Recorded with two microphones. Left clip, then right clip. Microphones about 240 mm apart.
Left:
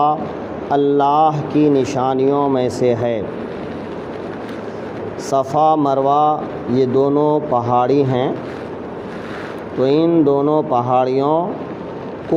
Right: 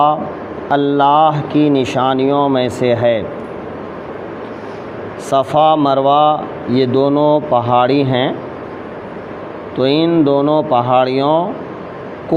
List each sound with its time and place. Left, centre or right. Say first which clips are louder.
0.7 s speech: right 3 dB; right
5.5 s speech: right 3 dB; right
9.8 s speech: right 1 dB; right